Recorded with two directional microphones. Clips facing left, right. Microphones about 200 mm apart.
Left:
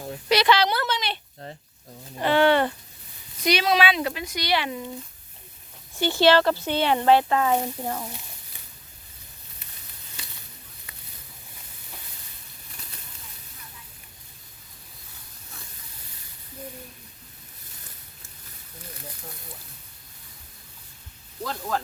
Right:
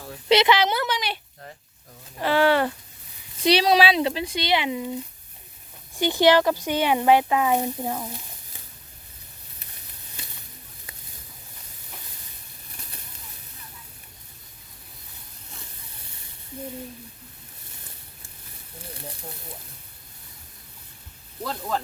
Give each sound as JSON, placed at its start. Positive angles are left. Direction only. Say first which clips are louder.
{"t": 0.3, "sound": "a sound", "louder": "right 2 dB", "side_deg": -20}
{"t": 2.1, "sound": "speech", "louder": "left 1 dB", "side_deg": -5}
{"t": 3.4, "sound": "speech", "louder": "right 3 dB", "side_deg": -30}
{"t": 6.0, "sound": "speech", "louder": "right 1 dB", "side_deg": -15}
{"t": 21.4, "sound": "speech", "louder": "even", "side_deg": 0}